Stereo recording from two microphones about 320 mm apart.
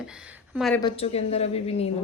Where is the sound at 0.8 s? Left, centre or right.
Centre.